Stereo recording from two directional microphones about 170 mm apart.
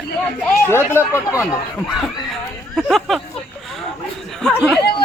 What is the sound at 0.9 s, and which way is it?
Speech, 15° left (ahead or behind).